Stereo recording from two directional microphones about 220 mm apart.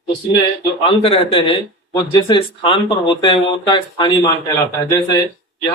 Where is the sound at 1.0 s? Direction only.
25° left (ahead or behind).